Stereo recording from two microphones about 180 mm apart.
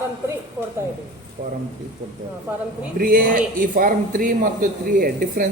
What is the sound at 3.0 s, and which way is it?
Speech, 50° right (ahead or behind).